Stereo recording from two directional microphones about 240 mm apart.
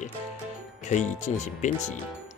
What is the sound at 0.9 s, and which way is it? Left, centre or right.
Speech, left.